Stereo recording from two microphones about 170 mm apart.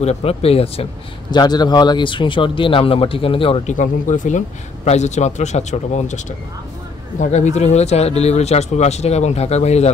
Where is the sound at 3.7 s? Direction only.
50° left (ahead or behind).